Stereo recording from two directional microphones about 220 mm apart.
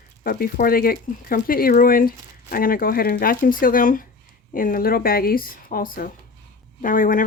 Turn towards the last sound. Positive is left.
turn(degrees=40)  # may be behind; listen again after turning